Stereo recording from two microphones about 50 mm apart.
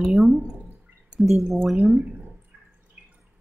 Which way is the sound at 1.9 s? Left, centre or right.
Right.